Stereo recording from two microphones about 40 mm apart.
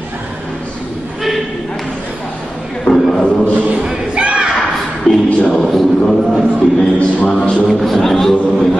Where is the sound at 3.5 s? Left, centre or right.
Right.